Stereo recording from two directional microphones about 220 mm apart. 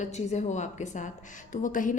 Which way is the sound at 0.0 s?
30° left (ahead or behind).